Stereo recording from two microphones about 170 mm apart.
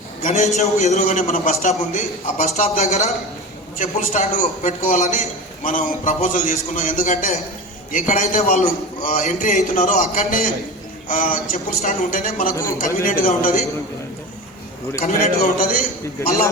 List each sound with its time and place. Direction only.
0.2 s a man's voice: 50° left (ahead or behind)
15.5 s a man's voice: 55° left (ahead or behind)